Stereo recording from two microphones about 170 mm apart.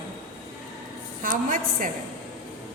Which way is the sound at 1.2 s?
55° right (ahead or behind).